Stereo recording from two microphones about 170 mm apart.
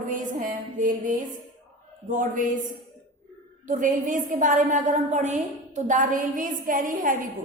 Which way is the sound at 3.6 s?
50° right (ahead or behind).